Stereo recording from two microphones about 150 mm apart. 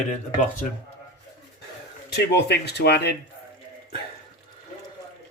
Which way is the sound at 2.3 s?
90° left.